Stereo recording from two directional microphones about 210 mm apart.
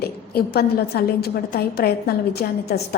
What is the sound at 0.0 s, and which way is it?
A woman's voice, 45° left (ahead or behind).